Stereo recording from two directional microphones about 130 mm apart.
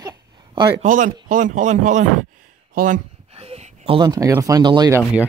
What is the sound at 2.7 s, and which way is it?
Speech, 90° right.